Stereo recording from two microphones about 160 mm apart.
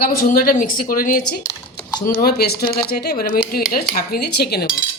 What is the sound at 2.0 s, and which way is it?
Speech, 70° left (ahead or behind).